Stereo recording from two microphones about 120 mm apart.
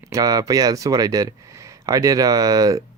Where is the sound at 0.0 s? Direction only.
30° right (ahead or behind).